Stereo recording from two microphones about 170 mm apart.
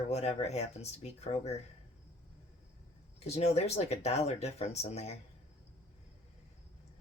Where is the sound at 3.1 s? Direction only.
40° left (ahead or behind).